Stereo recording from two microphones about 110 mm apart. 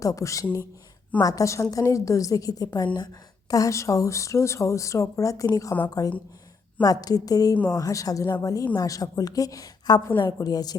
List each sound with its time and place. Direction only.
0.0 s a woman's voice: 30° left (ahead or behind)
3.5 s a woman's voice: 30° left (ahead or behind)